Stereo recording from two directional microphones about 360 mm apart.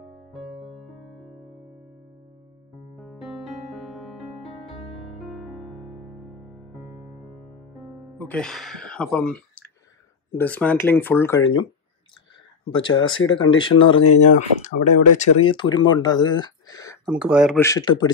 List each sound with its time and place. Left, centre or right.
0.0 s music: centre
3.0 s music: centre
10.3 s speech: centre
12.7 s speech: centre
14.0 s speech: left
14.3 s speech: centre
17.1 s speech: centre